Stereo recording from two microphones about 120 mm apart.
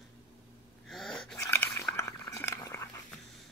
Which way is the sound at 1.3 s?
20° left (ahead or behind).